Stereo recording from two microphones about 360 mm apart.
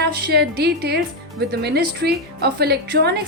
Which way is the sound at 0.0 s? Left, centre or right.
Right.